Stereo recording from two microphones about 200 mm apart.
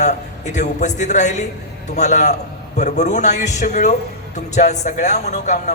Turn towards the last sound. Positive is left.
turn(degrees=35)  # may be behind; listen again after turning